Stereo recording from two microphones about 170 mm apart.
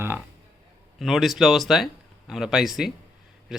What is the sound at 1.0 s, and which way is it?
Speech, centre (ahead or behind).